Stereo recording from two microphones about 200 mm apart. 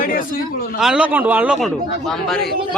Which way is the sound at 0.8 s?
5° right (ahead or behind).